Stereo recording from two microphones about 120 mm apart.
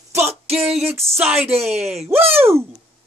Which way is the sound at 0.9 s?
20° right (ahead or behind).